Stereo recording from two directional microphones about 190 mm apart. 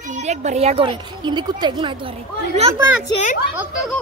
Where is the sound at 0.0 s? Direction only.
40° right (ahead or behind).